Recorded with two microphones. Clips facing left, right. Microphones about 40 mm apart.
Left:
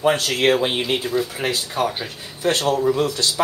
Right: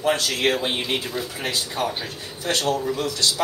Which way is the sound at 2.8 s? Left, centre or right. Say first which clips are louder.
Left 5 dB; left.